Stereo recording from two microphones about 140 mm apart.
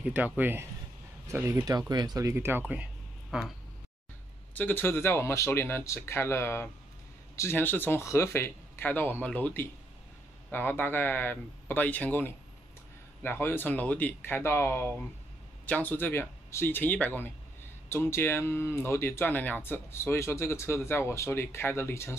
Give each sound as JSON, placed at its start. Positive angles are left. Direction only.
{"t": 0.0, "sound": "speech", "side_deg": -10}
{"t": 2.7, "sound": "a sound", "side_deg": -5}
{"t": 4.6, "sound": "speech", "side_deg": 15}